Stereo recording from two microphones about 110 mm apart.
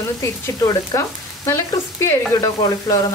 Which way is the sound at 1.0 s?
20° left (ahead or behind).